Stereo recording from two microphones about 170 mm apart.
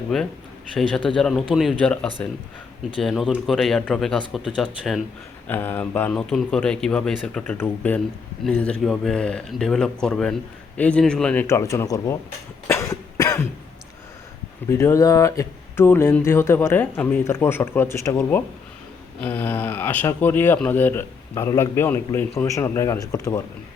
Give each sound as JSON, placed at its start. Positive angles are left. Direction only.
{"t": 0.1, "sound": "speech", "side_deg": 5}
{"t": 12.6, "sound": "cough", "side_deg": 15}
{"t": 14.7, "sound": "speech", "side_deg": 15}